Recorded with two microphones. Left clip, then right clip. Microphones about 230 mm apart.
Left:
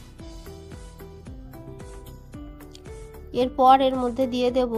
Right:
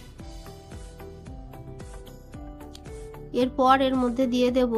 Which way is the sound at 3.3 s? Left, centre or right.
Left.